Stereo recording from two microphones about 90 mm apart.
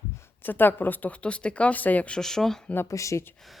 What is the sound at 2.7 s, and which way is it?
Speech, 30° left (ahead or behind).